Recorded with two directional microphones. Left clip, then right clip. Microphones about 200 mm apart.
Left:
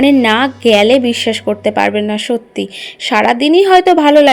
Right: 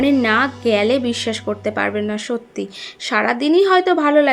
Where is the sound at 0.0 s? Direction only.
20° left (ahead or behind).